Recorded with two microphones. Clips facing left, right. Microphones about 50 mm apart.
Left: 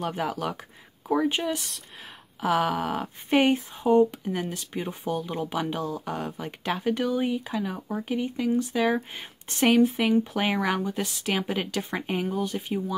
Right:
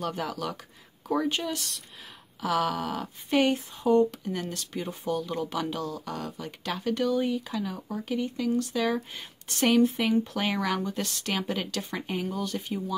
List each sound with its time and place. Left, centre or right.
0.0 s speech: left
9.7 s speech: centre